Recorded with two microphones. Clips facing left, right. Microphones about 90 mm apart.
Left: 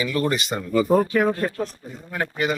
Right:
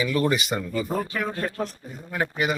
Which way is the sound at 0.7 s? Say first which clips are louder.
Left 14 dB; 60° left (ahead or behind).